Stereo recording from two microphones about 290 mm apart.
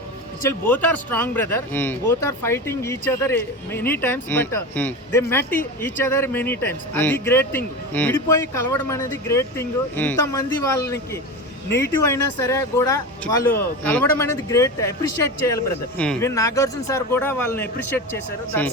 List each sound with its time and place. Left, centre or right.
0.6 s speech: centre